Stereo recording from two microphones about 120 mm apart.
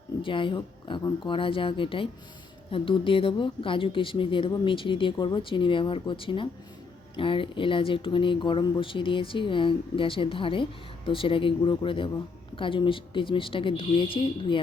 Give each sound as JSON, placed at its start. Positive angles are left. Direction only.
{"t": 0.2, "sound": "speech", "side_deg": 45}